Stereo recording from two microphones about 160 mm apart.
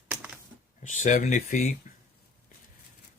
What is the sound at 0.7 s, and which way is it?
Speech, 50° left (ahead or behind).